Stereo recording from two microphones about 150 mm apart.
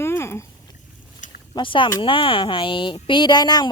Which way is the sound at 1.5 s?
35° left (ahead or behind).